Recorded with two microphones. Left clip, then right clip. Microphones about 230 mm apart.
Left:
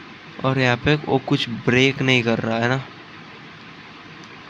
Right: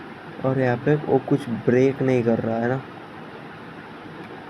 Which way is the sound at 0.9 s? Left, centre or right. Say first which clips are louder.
Even; left.